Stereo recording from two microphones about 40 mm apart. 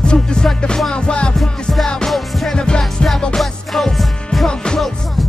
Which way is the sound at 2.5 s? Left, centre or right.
Left.